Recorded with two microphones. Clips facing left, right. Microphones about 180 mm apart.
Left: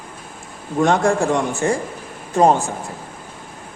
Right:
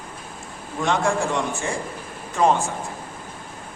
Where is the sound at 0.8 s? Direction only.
45° left (ahead or behind).